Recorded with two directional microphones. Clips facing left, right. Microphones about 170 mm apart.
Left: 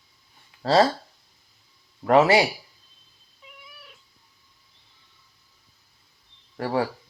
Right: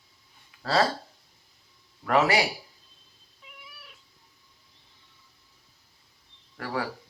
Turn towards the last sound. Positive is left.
turn(degrees=30)  # may be behind; listen again after turning